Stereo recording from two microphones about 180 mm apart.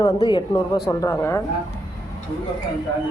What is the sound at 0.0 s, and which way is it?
Speech, 25° left (ahead or behind).